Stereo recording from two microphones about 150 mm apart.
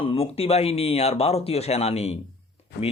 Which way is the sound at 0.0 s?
40° left (ahead or behind).